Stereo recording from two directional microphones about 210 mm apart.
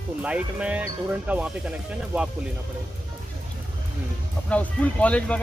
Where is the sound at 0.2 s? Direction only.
5° right (ahead or behind).